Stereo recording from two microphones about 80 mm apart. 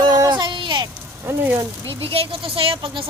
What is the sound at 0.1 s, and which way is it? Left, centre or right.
Child singing, right.